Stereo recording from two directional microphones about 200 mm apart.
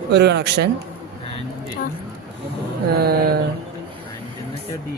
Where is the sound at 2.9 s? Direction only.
50° right (ahead or behind).